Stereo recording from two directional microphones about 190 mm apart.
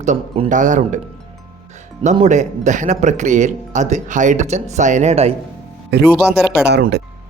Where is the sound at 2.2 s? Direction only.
40° right (ahead or behind).